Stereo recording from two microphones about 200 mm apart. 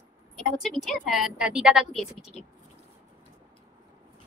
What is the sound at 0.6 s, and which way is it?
A woman's voice, centre (ahead or behind).